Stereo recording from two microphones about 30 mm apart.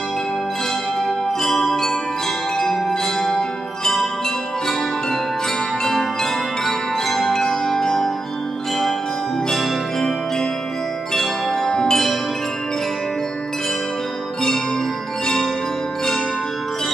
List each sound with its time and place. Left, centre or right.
1.0 s music: centre
6.6 s music: centre
7.2 s music: centre
9.5 s music: centre
11.7 s music: centre